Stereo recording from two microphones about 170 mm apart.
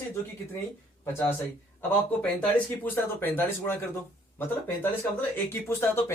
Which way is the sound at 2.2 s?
10° left (ahead or behind).